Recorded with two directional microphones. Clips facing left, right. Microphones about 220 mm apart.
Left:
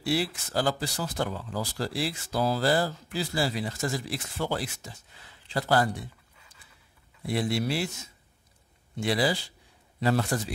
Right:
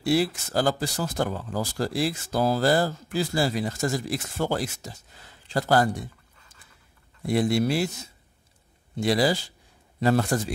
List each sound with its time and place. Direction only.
0.0 s speech: 45° right (ahead or behind)
7.2 s a man's voice: 45° right (ahead or behind)